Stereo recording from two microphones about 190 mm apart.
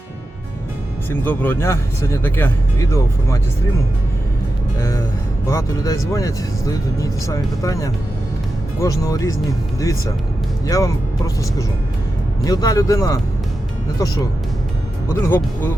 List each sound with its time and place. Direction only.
1.1 s speech: 10° left (ahead or behind)
4.8 s speech: 15° left (ahead or behind)
10.7 s speech: 20° left (ahead or behind)
12.5 s speech: 20° left (ahead or behind)
15.1 s speech: 10° left (ahead or behind)